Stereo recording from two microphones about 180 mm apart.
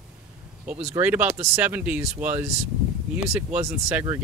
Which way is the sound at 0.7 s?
10° right (ahead or behind).